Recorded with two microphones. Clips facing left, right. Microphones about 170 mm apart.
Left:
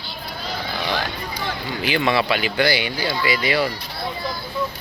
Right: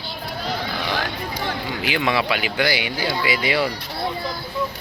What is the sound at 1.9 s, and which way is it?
Speech, 10° right (ahead or behind).